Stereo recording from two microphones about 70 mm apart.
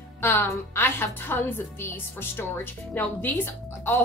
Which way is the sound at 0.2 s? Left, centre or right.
Left.